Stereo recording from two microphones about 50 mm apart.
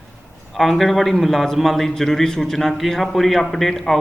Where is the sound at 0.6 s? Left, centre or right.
Centre.